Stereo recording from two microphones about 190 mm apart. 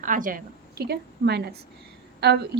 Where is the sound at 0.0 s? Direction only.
45° right (ahead or behind).